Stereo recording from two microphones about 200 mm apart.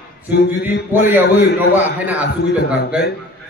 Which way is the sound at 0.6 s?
55° left (ahead or behind).